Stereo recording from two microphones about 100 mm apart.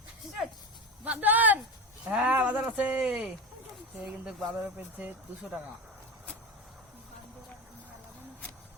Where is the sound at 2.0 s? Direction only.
10° right (ahead or behind).